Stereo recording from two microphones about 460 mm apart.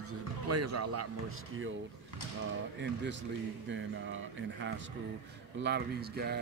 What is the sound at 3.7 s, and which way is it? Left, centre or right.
Speech, right.